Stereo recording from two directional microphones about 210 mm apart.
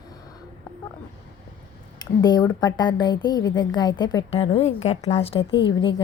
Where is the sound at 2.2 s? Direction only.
20° left (ahead or behind).